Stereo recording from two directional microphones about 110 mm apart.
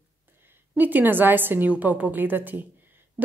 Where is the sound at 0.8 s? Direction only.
15° right (ahead or behind).